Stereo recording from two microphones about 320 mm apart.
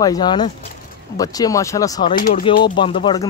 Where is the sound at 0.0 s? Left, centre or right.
Centre.